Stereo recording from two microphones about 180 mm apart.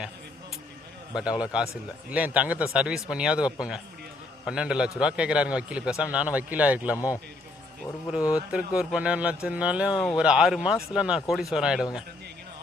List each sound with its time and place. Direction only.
1.1 s a man's voice: 5° right (ahead or behind)
6.9 s a man's voice: 15° left (ahead or behind)
8.4 s a man's voice: 5° right (ahead or behind)